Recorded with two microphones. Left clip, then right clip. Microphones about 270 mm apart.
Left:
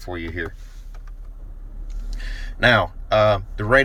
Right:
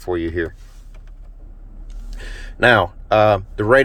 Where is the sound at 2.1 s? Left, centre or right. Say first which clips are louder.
Right 1 dB; right.